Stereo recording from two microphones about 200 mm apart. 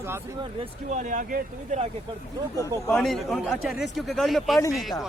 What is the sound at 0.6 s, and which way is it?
Speech, 35° right (ahead or behind).